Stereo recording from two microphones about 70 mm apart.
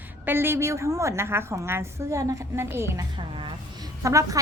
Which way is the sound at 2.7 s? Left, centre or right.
Right.